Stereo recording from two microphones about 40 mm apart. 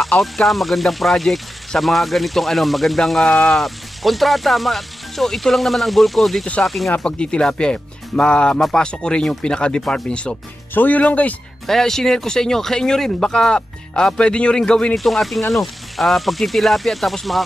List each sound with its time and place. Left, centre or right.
0.2 s speech: centre
7.1 s speech: left
10.7 s speech: left
11.0 s speech: left
11.6 s speech: centre; by 15.0 s left
15.0 s speech: centre